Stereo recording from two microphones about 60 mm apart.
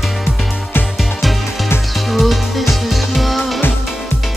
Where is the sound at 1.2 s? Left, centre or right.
Centre.